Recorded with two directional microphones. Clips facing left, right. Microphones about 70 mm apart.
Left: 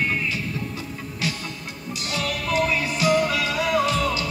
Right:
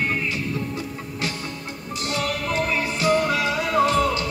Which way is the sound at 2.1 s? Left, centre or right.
Right.